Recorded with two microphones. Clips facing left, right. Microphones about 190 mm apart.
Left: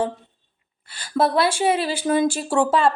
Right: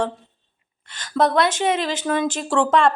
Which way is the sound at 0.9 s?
10° left (ahead or behind).